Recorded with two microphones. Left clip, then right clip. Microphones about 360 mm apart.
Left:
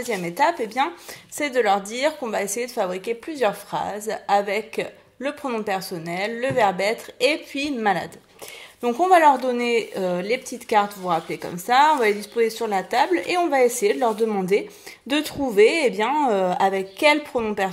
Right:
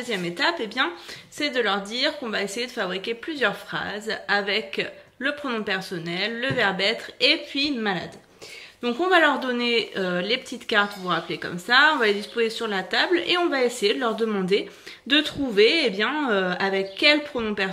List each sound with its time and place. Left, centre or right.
0.1 s a woman's voice: centre